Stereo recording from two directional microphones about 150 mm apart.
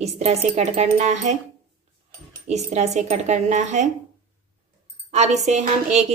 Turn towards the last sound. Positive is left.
turn(degrees=-45)  # may be behind; listen again after turning